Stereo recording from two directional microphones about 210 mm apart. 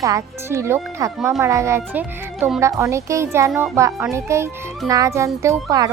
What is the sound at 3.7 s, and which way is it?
Speech, 15° right (ahead or behind).